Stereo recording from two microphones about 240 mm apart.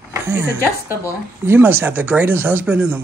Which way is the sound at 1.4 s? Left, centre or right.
Centre.